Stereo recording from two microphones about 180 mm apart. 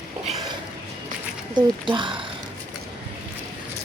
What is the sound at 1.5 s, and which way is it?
Speech, 25° right (ahead or behind).